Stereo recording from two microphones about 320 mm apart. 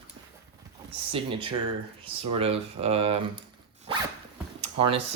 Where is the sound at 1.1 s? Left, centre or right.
Centre.